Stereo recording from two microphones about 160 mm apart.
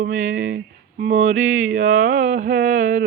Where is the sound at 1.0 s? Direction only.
50° right (ahead or behind).